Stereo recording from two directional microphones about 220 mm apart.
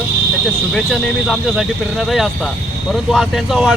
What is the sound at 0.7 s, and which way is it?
Speech, centre (ahead or behind).